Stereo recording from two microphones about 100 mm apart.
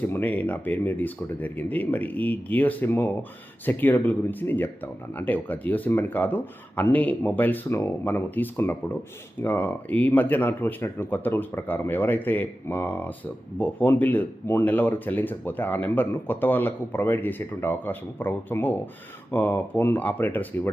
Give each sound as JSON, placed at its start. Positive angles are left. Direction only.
{"t": 0.0, "sound": "speech", "side_deg": 20}